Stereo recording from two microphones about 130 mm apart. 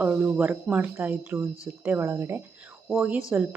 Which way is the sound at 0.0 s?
15° right (ahead or behind).